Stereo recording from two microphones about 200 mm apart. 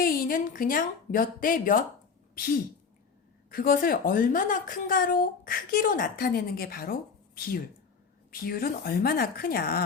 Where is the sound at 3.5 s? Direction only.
45° left (ahead or behind).